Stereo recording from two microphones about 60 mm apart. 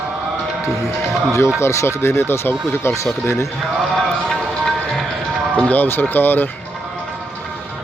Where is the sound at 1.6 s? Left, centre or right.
Left.